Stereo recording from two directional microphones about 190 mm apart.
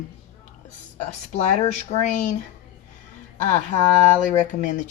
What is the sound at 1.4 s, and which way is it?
Speech, 35° left (ahead or behind).